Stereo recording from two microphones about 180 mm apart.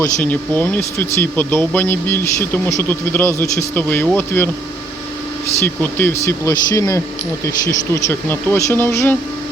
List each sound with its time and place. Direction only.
0.0 s speech: 10° left (ahead or behind)
5.6 s speech: 10° left (ahead or behind)